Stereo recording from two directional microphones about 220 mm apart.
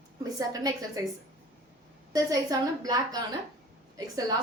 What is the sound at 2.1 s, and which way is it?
A woman's voice, 15° right (ahead or behind).